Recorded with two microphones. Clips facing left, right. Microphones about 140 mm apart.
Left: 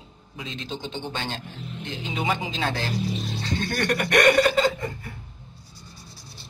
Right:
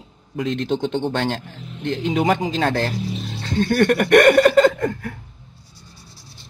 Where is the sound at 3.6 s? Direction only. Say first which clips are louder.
Right 10 dB; 45° right (ahead or behind); by 5.1 s 65° right (ahead or behind).